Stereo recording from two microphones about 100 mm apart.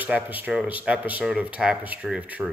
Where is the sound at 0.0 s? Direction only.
15° right (ahead or behind).